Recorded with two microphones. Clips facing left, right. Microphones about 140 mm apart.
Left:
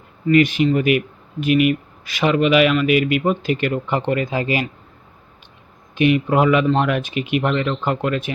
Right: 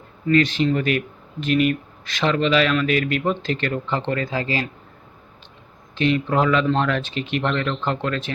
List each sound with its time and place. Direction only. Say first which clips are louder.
0.3 s speech: left 3 dB; 10° left (ahead or behind)
5.9 s speech: left 4 dB; 15° left (ahead or behind)